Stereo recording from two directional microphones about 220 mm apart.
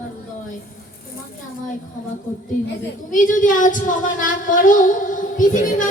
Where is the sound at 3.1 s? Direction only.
35° left (ahead or behind).